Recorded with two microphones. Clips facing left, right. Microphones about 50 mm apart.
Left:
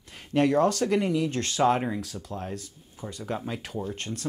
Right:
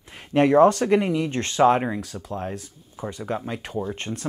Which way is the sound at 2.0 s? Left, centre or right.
Centre.